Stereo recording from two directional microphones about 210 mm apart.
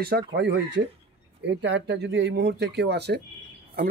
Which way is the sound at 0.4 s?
55° right (ahead or behind).